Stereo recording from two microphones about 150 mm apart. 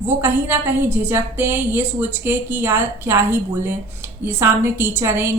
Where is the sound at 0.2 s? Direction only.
15° right (ahead or behind).